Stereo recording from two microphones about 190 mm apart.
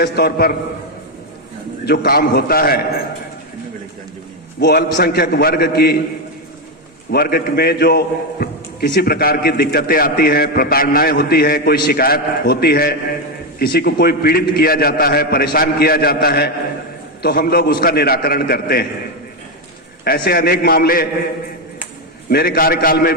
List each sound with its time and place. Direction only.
0.0 s a man's voice: 55° left (ahead or behind)
1.8 s a man's voice: 60° left (ahead or behind)
4.6 s a man's voice: 55° left (ahead or behind)
7.1 s a man's voice: 50° left (ahead or behind)
20.1 s a man's voice: 50° left (ahead or behind)
22.3 s a man's voice: 55° left (ahead or behind)